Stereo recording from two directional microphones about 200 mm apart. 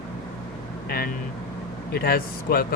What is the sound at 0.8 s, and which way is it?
Speech, 50° left (ahead or behind).